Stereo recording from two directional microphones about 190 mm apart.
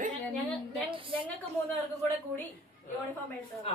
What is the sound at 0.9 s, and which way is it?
Speech, 25° right (ahead or behind).